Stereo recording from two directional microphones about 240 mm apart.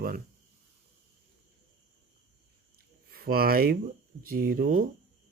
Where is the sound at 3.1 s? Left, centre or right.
Right.